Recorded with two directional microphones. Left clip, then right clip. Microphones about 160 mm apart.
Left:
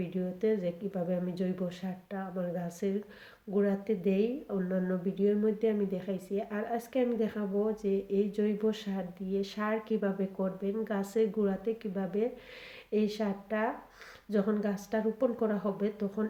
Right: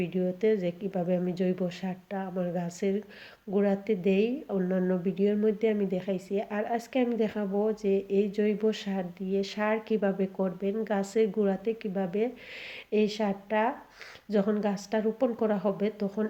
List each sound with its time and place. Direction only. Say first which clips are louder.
0.0 s a woman's voice: right 5 dB; 35° right (ahead or behind)